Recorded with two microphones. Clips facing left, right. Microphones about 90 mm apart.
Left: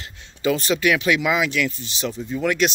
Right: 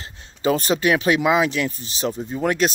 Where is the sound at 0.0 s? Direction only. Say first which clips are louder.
Right 1 dB; 35° right (ahead or behind).